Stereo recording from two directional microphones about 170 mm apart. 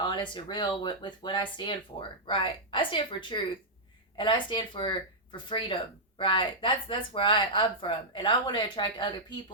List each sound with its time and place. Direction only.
0.0 s speech: 25° left (ahead or behind)